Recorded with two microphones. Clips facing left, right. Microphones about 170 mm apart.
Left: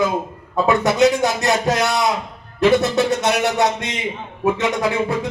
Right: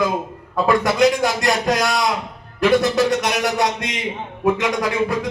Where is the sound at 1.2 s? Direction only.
25° left (ahead or behind).